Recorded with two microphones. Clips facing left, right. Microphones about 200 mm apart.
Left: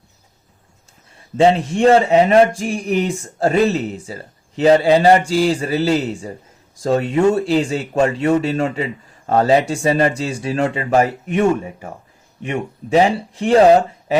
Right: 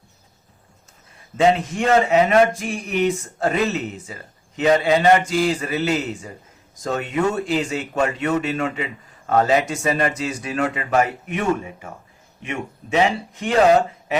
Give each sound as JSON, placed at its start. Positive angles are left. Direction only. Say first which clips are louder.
{"t": 1.4, "sound": "speech", "louder": "left 4 dB", "side_deg": 30}